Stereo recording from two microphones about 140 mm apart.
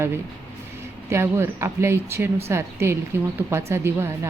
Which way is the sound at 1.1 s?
20° right (ahead or behind).